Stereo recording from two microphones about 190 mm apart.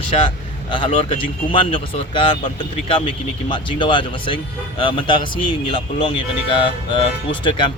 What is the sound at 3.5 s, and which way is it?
Speech, 25° left (ahead or behind).